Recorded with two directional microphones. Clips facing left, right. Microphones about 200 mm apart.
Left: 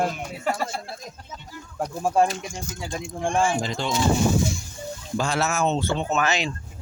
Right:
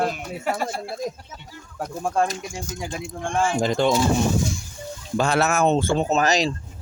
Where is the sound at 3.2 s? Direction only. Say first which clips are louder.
Left 1 dB; 15° left (ahead or behind).